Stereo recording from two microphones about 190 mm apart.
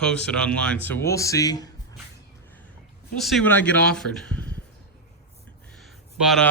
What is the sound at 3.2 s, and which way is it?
Speech, centre (ahead or behind).